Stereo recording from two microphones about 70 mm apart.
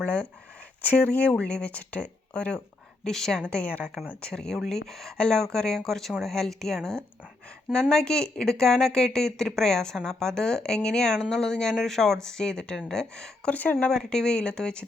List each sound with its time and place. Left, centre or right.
0.8 s speech: left
3.0 s speech: centre
13.5 s speech: left
13.7 s speech: centre